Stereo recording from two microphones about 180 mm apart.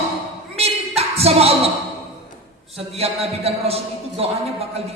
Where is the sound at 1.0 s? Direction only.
35° right (ahead or behind).